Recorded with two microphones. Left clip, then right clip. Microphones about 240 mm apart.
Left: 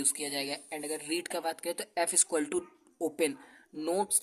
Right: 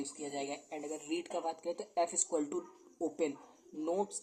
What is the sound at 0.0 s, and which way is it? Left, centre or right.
Speech, left.